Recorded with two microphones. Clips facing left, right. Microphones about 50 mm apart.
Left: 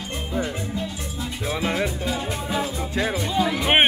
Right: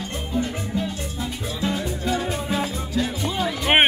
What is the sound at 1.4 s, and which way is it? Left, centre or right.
Music, left.